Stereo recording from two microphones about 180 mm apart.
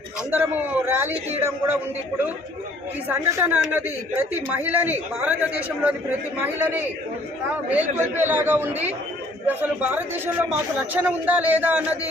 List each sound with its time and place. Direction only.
0.3 s speech: 10° right (ahead or behind)
1.1 s a man's voice: 35° right (ahead or behind)
3.1 s speech: 10° right (ahead or behind)
10.9 s speech: 10° right (ahead or behind)